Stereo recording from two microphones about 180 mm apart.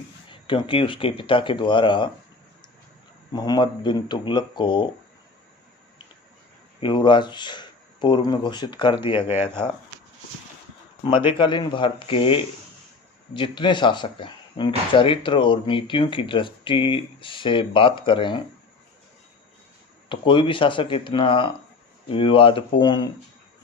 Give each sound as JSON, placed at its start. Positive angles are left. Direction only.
{"t": 0.3, "sound": "speech", "side_deg": 30}
{"t": 3.3, "sound": "speech", "side_deg": 25}
{"t": 6.7, "sound": "speech", "side_deg": 25}
{"t": 11.3, "sound": "speech", "side_deg": 25}
{"t": 20.1, "sound": "speech", "side_deg": 30}